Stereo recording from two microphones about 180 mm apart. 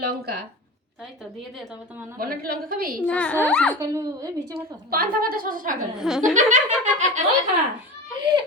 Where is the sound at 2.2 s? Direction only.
60° right (ahead or behind).